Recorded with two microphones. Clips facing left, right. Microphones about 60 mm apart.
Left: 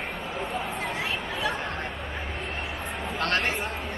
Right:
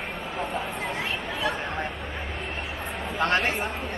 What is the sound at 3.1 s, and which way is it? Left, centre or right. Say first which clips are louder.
Speech: right 3 dB; centre.